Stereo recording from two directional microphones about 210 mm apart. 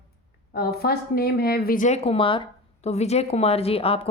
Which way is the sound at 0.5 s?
50° left (ahead or behind).